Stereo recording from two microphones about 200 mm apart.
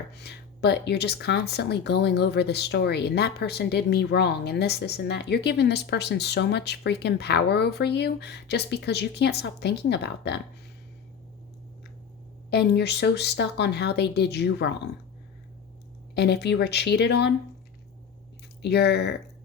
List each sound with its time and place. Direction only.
0.1 s speech: 55° left (ahead or behind)
12.5 s speech: 55° left (ahead or behind)
16.1 s speech: 55° left (ahead or behind)
18.6 s speech: 55° left (ahead or behind)